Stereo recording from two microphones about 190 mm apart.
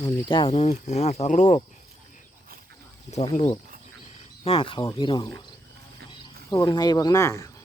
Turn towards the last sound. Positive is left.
turn(degrees=15)  # may be behind; listen again after turning